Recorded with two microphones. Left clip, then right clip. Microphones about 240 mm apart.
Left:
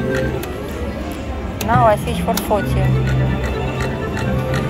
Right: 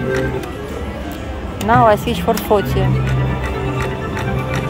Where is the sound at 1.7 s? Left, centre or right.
Right.